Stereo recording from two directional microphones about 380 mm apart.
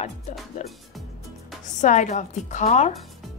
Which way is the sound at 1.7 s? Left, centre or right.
Centre.